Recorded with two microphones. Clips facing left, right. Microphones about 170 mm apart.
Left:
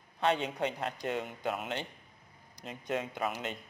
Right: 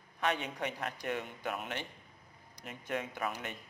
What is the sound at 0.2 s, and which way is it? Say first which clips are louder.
A man's voice: left 4 dB; 25° left (ahead or behind).